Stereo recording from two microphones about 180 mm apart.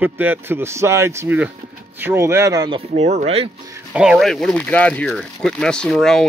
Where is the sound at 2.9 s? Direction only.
40° right (ahead or behind).